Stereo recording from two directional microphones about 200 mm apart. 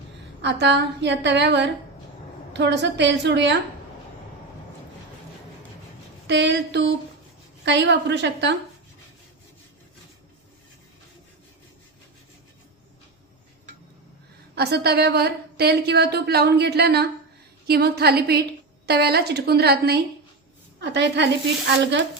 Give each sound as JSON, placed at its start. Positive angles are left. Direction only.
{"t": 0.4, "sound": "a woman's voice", "side_deg": -60}
{"t": 6.2, "sound": "a woman's voice", "side_deg": -60}
{"t": 14.5, "sound": "a woman's voice", "side_deg": -55}